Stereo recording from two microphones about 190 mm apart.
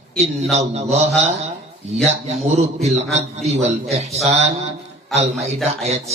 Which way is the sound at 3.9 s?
35° right (ahead or behind).